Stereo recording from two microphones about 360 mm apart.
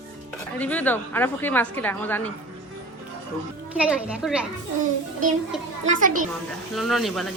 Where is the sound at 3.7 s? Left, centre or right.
Centre.